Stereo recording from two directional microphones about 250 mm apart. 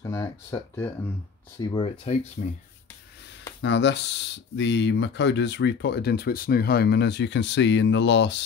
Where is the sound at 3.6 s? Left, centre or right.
Left.